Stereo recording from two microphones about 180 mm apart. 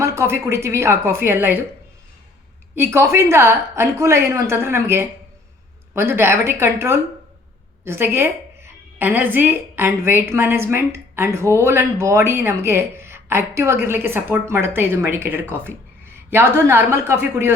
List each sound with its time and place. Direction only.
0.0 s a woman's voice: 15° right (ahead or behind)
2.7 s a woman's voice: 15° right (ahead or behind)